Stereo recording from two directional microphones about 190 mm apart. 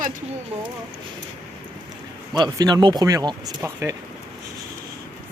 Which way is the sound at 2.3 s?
20° right (ahead or behind).